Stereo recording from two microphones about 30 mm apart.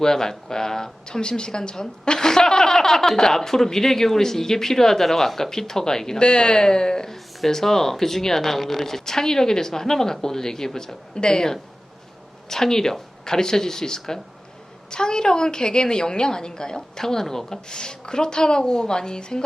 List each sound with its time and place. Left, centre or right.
0.0 s a woman's voice: centre
7.1 s a woman's voice: centre
17.7 s a woman's voice: left